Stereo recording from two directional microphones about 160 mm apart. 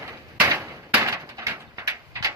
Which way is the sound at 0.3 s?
15° right (ahead or behind).